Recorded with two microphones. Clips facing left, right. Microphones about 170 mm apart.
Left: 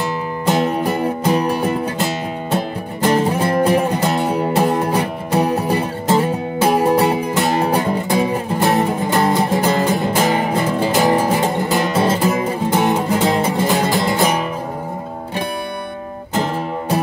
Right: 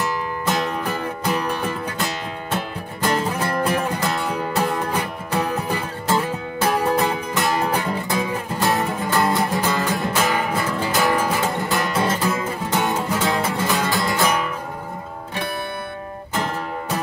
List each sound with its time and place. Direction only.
1.0 s music: 30° left (ahead or behind)
4.4 s music: 35° left (ahead or behind)
12.4 s music: 20° left (ahead or behind)